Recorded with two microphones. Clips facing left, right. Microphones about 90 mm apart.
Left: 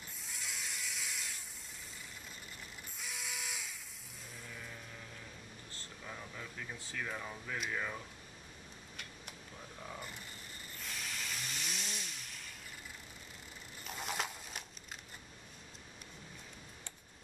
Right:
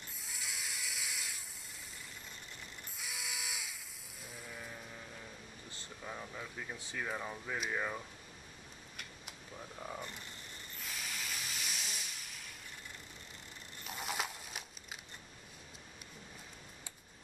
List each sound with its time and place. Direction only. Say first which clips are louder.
0.0 s a sound: even; centre (ahead or behind)
3.0 s mechanisms: even; centre (ahead or behind)
4.4 s sheep: right 2 dB; 15° right (ahead or behind)
5.7 s speech: right 3 dB; 15° right (ahead or behind)
9.9 s a sound: right 2 dB; 5° left (ahead or behind)
13.8 s coin: even; 5° right (ahead or behind)